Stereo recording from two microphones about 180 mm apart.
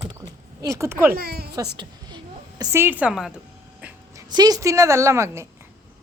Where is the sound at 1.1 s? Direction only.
60° right (ahead or behind).